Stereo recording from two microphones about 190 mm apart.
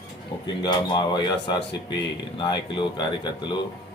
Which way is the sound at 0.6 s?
20° left (ahead or behind).